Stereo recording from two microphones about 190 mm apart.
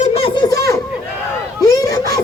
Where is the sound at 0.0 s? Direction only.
30° left (ahead or behind).